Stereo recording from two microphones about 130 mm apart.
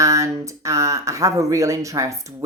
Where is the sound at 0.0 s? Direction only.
25° right (ahead or behind).